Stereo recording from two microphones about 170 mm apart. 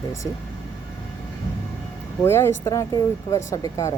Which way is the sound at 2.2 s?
15° left (ahead or behind).